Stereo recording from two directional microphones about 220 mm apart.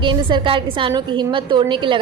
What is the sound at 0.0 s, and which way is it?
A woman's voice, 20° right (ahead or behind).